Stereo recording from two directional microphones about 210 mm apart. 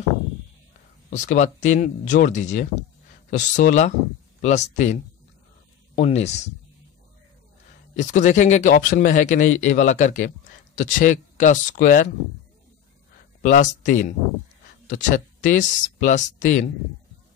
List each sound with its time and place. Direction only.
1.1 s speech: 35° left (ahead or behind)
8.0 s speech: 35° left (ahead or behind)
13.4 s speech: 35° left (ahead or behind)